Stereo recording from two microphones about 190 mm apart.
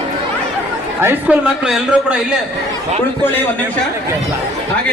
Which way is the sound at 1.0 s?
5° right (ahead or behind).